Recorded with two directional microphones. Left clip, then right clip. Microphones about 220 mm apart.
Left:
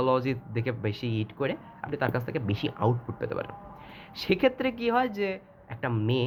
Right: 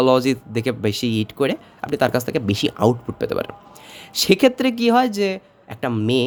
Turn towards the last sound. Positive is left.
turn(degrees=-55)  # may be behind; listen again after turning